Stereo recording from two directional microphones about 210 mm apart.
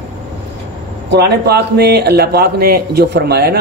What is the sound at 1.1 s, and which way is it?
A man's voice, 50° right (ahead or behind).